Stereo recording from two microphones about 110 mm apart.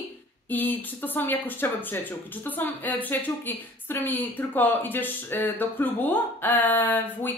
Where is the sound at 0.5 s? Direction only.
15° left (ahead or behind).